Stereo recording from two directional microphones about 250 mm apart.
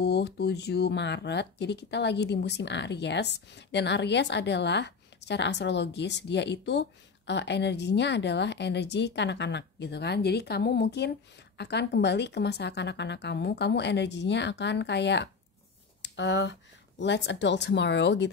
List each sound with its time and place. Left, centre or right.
0.0 s speech: left